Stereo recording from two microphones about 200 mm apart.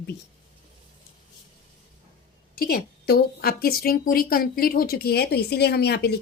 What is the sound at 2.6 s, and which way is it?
A woman's voice, 50° left (ahead or behind).